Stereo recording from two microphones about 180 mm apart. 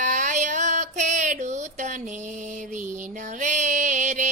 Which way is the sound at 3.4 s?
45° right (ahead or behind).